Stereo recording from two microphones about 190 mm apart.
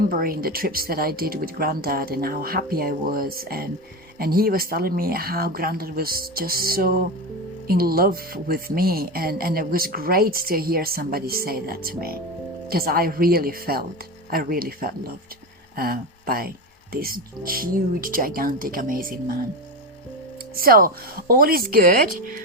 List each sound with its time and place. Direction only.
0.1 s speech: 50° right (ahead or behind)
20.6 s speech: 50° right (ahead or behind)